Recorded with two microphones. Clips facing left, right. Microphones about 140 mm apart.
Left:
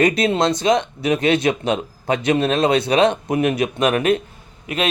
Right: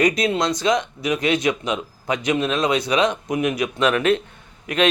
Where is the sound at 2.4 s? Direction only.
60° left (ahead or behind).